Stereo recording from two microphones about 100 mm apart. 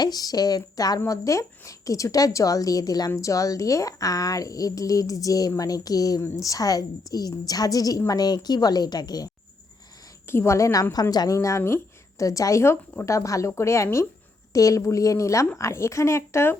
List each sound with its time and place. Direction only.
0.0 s a woman's voice: 40° left (ahead or behind)
10.2 s a woman's voice: 25° left (ahead or behind)